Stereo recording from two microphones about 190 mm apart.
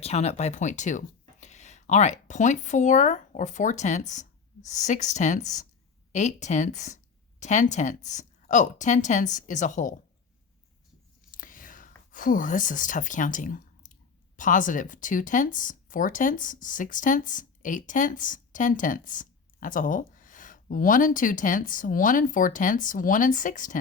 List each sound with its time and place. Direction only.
0.0 s speech: 35° left (ahead or behind)
11.3 s whispering: 45° left (ahead or behind)
14.3 s speech: 40° left (ahead or behind)